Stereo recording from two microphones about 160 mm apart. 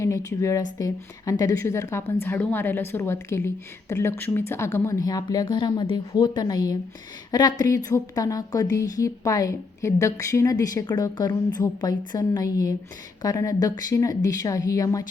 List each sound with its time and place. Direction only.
0.0 s a woman's voice: 20° left (ahead or behind)